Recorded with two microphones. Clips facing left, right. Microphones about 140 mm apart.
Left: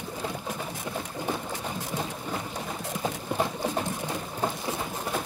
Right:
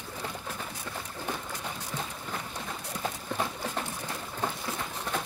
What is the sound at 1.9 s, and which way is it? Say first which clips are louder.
Clip-clop: left 5 dB; 15° left (ahead or behind).